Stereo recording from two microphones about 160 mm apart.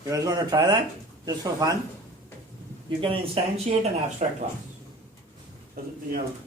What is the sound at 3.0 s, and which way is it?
Speech, 35° right (ahead or behind).